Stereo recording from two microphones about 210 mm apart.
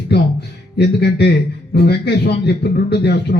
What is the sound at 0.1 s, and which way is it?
A man's voice, 50° left (ahead or behind).